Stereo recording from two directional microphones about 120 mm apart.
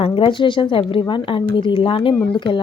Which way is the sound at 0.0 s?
45° left (ahead or behind).